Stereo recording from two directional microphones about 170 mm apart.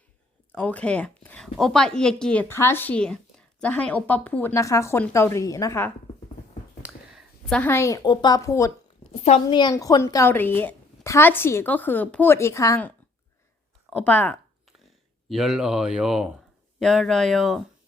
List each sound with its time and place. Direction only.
0.5 s a woman's voice: 5° left (ahead or behind)
7.5 s a woman's voice: 10° left (ahead or behind)
9.1 s a woman's voice: 35° left (ahead or behind); by 12.9 s 20° left (ahead or behind)
13.9 s a woman's voice: 10° left (ahead or behind)